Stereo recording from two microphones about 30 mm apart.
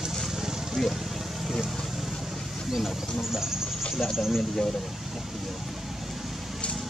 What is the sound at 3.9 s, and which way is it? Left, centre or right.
Speech, centre.